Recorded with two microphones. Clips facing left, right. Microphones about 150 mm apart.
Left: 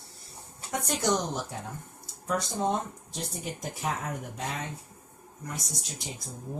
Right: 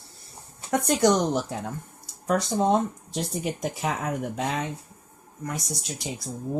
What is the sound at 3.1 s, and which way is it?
Speech, 90° right.